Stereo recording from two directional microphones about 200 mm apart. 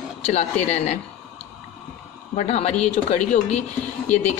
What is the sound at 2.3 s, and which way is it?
A woman's voice, 35° left (ahead or behind).